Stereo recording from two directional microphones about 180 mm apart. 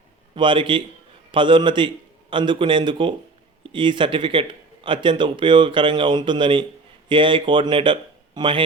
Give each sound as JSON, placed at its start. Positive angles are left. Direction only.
{"t": 0.3, "sound": "a man's voice", "side_deg": -25}